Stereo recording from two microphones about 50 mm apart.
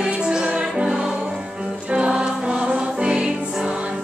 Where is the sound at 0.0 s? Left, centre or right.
Centre.